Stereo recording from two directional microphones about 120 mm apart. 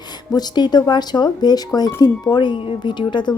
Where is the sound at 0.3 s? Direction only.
35° left (ahead or behind).